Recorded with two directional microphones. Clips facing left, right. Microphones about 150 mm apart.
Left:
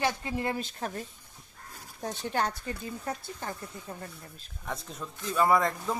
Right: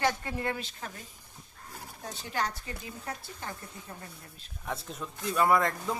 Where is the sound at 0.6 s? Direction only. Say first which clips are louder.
Left 6 dB; 50° left (ahead or behind).